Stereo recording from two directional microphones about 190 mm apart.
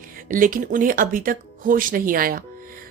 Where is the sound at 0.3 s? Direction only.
45° right (ahead or behind).